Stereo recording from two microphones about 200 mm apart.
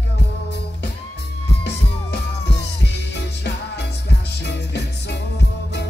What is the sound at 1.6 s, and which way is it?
Music, 60° left (ahead or behind).